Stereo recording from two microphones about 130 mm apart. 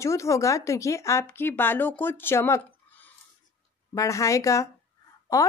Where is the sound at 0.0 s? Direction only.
25° left (ahead or behind).